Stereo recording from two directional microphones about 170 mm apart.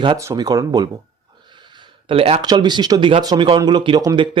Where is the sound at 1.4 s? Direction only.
25° right (ahead or behind).